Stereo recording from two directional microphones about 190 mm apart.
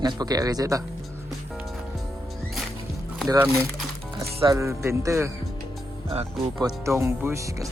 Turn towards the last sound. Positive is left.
turn(degrees=-15)  # may be behind; listen again after turning